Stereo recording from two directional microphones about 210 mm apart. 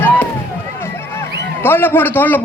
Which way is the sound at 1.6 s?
10° left (ahead or behind).